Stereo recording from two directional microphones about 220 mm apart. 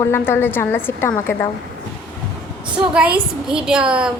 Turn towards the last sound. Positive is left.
turn(degrees=-5)  # may be behind; listen again after turning